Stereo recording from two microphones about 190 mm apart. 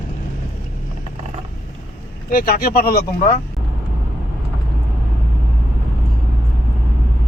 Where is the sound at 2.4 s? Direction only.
50° left (ahead or behind).